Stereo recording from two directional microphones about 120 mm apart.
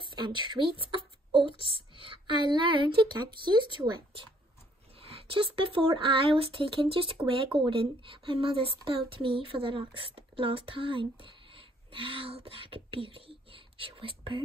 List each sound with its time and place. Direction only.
0.1 s speech: 40° right (ahead or behind)
5.0 s speech: 50° right (ahead or behind)